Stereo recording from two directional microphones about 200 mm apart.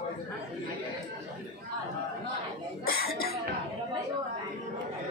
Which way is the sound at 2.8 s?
50° left (ahead or behind).